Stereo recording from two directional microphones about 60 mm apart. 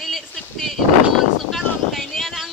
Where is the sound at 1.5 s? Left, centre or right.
Centre.